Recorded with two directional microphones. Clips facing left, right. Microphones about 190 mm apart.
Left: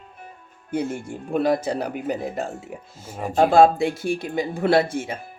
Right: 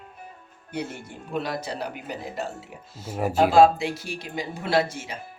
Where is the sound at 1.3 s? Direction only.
50° left (ahead or behind).